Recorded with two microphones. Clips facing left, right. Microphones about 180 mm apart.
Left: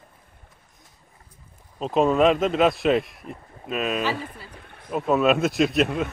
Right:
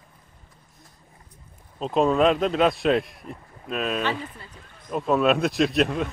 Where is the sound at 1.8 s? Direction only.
Centre (ahead or behind).